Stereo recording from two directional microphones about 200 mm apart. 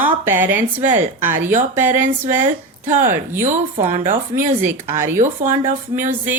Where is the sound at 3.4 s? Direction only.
35° right (ahead or behind).